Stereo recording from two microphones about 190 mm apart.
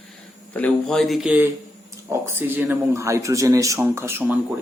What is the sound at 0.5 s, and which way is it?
Speech, 5° left (ahead or behind).